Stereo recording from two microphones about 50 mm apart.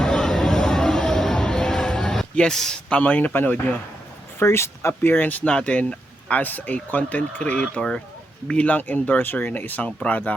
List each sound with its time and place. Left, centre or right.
0.0 s a sound: centre
3.0 s speech: left
4.4 s speech: left
5.0 s speech: left
5.5 s speech: left
7.6 s speech: centre
8.4 s speech: left
9.8 s speech: left